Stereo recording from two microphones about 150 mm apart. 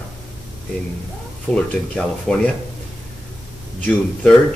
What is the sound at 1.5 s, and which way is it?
Speech, 5° left (ahead or behind).